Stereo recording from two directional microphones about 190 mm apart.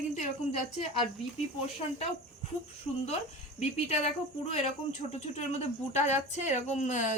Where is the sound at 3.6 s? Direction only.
35° left (ahead or behind).